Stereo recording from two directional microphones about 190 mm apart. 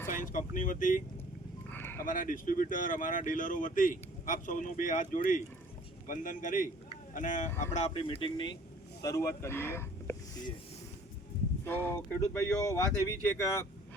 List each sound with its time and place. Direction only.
0.3 s speech: 45° left (ahead or behind)
1.7 s a sound: 10° left (ahead or behind)
2.0 s speech: 45° left (ahead or behind); by 10.2 s 10° left (ahead or behind)
11.6 s speech: 10° left (ahead or behind)